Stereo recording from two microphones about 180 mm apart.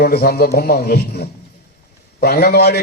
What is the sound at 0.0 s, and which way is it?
A man's voice, 60° left (ahead or behind).